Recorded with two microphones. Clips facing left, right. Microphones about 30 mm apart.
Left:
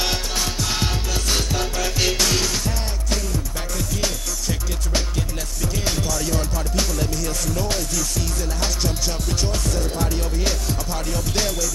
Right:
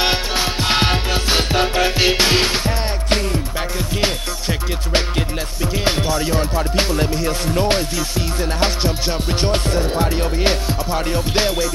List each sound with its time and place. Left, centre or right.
0.0 s music: right